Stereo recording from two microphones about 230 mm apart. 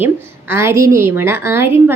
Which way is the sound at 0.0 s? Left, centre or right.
Centre.